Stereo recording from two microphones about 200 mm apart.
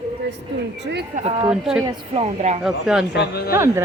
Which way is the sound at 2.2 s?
35° right (ahead or behind).